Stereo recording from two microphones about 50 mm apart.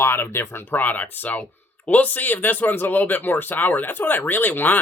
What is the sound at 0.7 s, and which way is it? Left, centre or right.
Speech, left.